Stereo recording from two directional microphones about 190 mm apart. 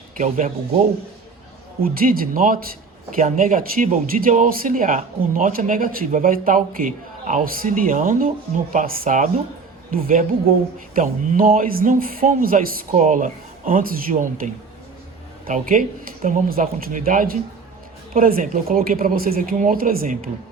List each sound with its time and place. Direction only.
0.2 s speech: 40° right (ahead or behind)
1.8 s speech: 50° right (ahead or behind)